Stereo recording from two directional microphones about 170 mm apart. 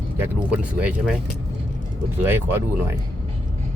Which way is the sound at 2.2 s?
15° right (ahead or behind).